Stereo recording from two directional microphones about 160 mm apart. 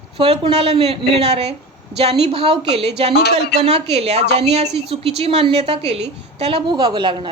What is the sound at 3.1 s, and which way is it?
Speech, 90° left.